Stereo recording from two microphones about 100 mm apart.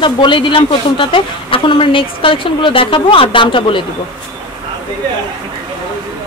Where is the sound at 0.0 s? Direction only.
55° left (ahead or behind).